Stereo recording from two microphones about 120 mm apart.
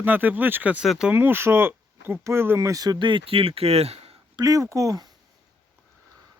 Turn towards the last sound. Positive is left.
turn(degrees=-30)  # may be behind; listen again after turning